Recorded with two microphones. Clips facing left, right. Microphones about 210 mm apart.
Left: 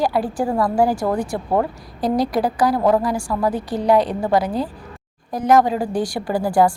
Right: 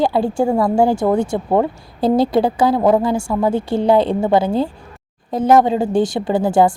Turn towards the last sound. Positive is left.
turn(degrees=-25)  # may be behind; listen again after turning